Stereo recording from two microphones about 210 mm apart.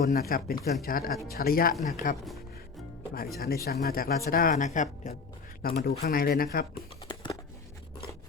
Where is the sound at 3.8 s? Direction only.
45° left (ahead or behind).